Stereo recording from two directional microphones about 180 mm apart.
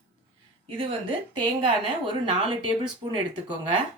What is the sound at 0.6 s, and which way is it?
A woman's voice, 30° right (ahead or behind).